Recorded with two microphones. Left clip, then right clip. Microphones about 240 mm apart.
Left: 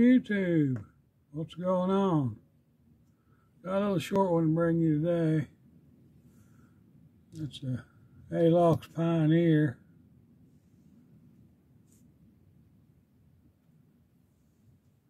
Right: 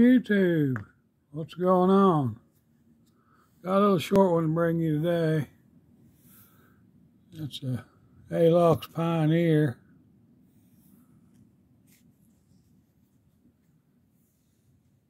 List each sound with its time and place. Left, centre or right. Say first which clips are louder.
0.0 s speech: right 4 dB; centre
3.7 s speech: right 6 dB; centre
7.6 s speech: right 3 dB; centre